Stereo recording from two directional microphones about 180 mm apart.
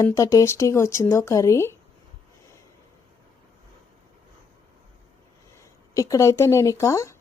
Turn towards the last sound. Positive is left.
turn(degrees=15)  # may be behind; listen again after turning